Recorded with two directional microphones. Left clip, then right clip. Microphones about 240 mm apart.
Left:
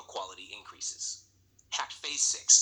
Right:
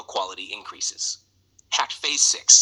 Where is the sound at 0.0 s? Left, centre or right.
Right.